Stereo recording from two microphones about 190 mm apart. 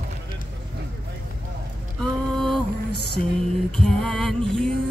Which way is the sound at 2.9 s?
60° left (ahead or behind).